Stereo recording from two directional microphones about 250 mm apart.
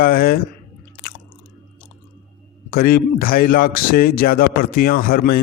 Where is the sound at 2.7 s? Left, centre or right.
Left.